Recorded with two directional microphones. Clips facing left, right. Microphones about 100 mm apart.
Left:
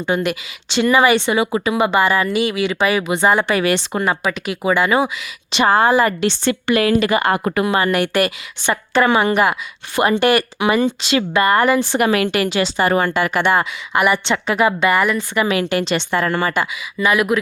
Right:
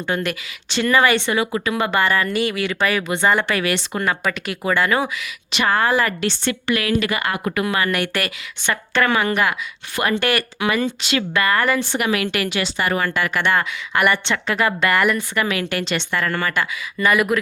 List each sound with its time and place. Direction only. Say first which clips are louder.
0.0 s speech: left 4 dB; 15° left (ahead or behind)
3.4 s speech: left 4 dB; 30° left (ahead or behind)
3.9 s speech: left 3 dB; 20° left (ahead or behind)
4.2 s speech: left 3 dB; 5° left (ahead or behind)
5.5 s speech: left 5 dB; 30° left (ahead or behind); by 15.2 s 5° left (ahead or behind)
15.4 s speech: left 5 dB; 25° left (ahead or behind)
17.0 s speech: left 1 dB; 5° left (ahead or behind)